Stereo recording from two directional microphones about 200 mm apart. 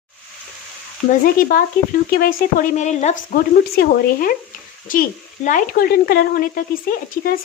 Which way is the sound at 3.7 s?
45° left (ahead or behind).